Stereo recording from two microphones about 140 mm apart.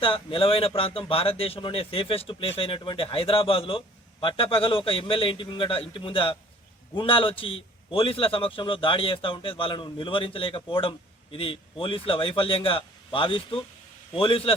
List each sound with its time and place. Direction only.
0.0 s a man's voice: 40° left (ahead or behind)